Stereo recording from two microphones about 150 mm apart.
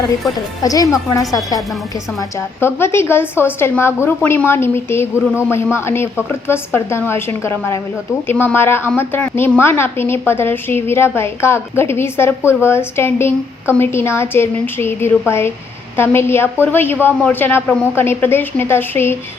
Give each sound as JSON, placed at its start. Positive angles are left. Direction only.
{"t": 0.6, "sound": "a woman's voice", "side_deg": 25}
{"t": 2.6, "sound": "a woman's voice", "side_deg": 15}